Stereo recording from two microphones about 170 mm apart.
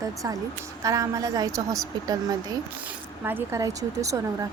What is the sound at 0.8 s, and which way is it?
Speech, 20° right (ahead or behind).